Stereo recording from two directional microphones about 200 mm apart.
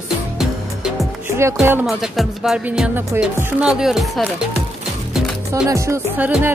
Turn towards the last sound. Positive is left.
turn(degrees=-10)  # may be behind; listen again after turning